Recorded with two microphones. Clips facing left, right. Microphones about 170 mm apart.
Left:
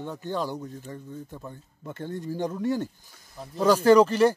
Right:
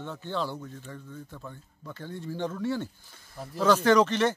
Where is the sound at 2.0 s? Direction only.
45° left (ahead or behind).